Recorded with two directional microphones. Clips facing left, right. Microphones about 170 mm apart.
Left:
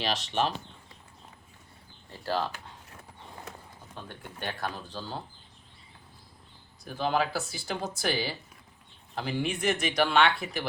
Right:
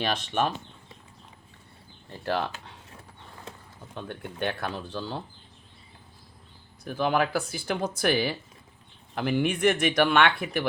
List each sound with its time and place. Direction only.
0.0 s speech: 55° right (ahead or behind)
3.9 s speech: 65° right (ahead or behind)
6.8 s speech: 55° right (ahead or behind)